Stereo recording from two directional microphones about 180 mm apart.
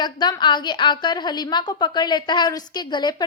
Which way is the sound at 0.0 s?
25° left (ahead or behind).